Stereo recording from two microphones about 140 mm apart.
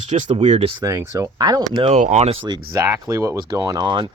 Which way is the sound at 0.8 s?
25° right (ahead or behind).